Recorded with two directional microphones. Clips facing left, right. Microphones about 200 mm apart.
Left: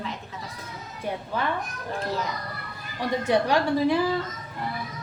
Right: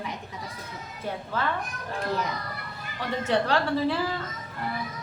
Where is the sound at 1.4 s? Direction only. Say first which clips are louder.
Even; 15° left (ahead or behind).